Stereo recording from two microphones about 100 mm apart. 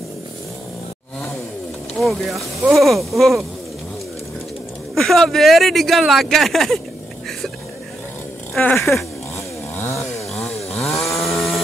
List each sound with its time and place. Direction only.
2.0 s speech: centre (ahead or behind)
4.9 s speech: 5° left (ahead or behind)
8.7 s speech: centre (ahead or behind)
9.8 s chainsaw: 25° left (ahead or behind)
10.3 s chainsaw: 5° left (ahead or behind)